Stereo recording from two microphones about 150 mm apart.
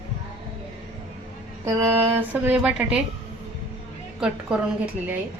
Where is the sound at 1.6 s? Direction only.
15° right (ahead or behind).